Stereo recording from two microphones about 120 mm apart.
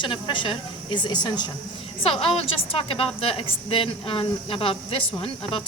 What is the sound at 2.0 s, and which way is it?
A woman's voice, 50° left (ahead or behind).